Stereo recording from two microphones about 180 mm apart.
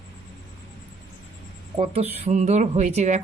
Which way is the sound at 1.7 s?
30° right (ahead or behind).